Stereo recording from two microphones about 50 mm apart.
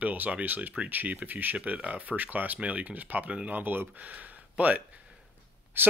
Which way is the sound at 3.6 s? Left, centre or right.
Right.